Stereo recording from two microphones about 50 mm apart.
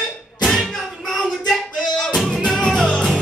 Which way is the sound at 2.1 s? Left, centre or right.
Centre.